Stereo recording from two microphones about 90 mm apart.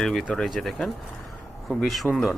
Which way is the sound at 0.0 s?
5° left (ahead or behind).